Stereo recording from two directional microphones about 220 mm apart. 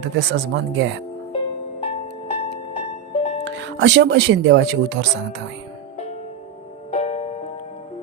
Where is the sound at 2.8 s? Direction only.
25° left (ahead or behind).